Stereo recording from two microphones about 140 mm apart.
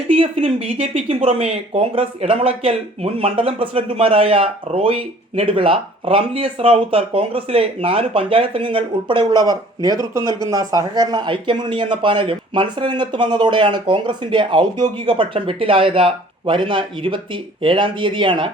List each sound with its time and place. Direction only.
0.1 s speech: 40° right (ahead or behind)